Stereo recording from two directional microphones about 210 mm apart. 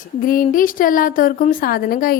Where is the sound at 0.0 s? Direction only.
40° left (ahead or behind).